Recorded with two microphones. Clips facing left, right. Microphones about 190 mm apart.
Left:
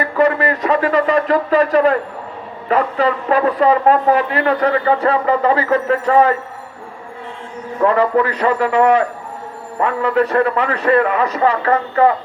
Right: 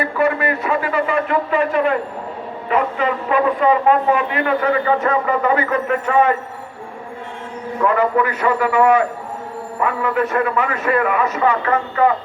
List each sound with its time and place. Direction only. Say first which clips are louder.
0.0 s a man's voice: left 3 dB; 35° left (ahead or behind)
7.8 s a man's voice: left 3 dB; 35° left (ahead or behind)